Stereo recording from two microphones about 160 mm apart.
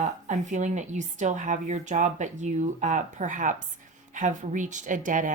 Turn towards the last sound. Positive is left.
turn(degrees=-55)  # may be behind; listen again after turning